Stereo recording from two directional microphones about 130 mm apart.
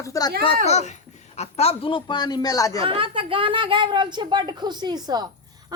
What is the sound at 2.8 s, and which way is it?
Speech, 45° right (ahead or behind).